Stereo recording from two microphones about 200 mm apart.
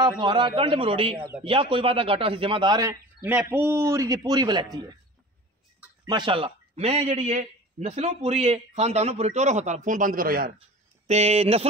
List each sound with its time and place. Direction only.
0.2 s a man's voice: 25° right (ahead or behind)
6.0 s a man's voice: 25° right (ahead or behind); by 10.5 s 45° right (ahead or behind)
11.1 s a man's voice: 30° right (ahead or behind)